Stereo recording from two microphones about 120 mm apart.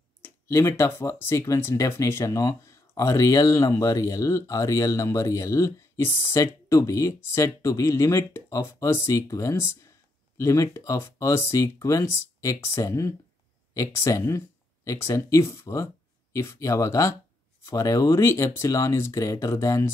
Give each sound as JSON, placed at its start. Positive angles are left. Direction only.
{"t": 0.2, "sound": "speech", "side_deg": 20}